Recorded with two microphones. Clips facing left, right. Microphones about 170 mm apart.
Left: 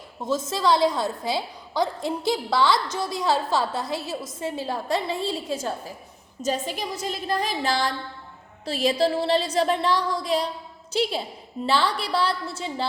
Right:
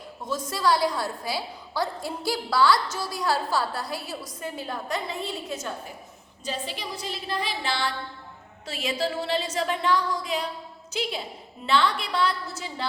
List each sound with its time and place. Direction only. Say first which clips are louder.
0.3 s a woman's voice: left 3 dB; 25° left (ahead or behind)
6.4 s a woman's voice: left 6 dB; 45° left (ahead or behind); by 12.8 s 30° left (ahead or behind)